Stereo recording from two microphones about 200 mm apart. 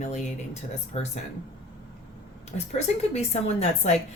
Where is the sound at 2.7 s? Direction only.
35° left (ahead or behind).